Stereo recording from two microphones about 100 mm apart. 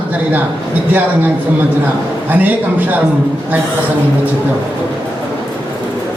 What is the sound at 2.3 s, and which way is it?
Speech, 15° right (ahead or behind).